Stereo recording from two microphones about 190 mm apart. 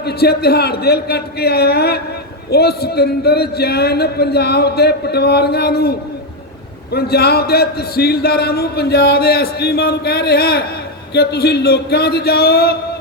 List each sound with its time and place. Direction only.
0.0 s a man's voice: 55° left (ahead or behind)
6.9 s a man's voice: 55° left (ahead or behind)